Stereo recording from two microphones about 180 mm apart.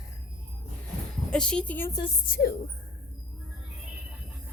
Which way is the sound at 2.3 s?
60° left (ahead or behind).